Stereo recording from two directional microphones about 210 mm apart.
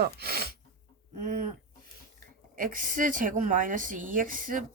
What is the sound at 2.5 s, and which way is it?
Speech, 40° right (ahead or behind).